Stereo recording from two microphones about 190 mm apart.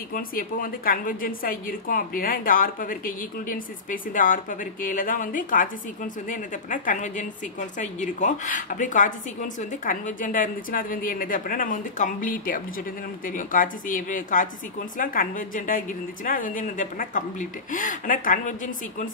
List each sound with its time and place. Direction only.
0.1 s a woman's voice: 50° left (ahead or behind)